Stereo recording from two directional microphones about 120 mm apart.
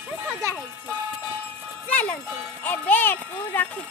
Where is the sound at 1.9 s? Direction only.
15° left (ahead or behind).